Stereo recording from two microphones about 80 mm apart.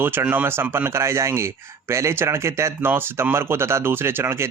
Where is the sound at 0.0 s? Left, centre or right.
Right.